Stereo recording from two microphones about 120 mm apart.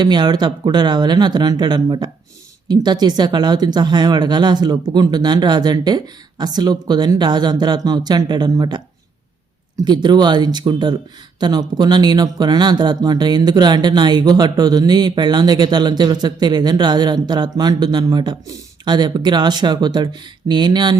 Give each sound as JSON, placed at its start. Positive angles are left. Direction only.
{"t": 0.0, "sound": "speech", "side_deg": -35}
{"t": 9.8, "sound": "speech", "side_deg": -35}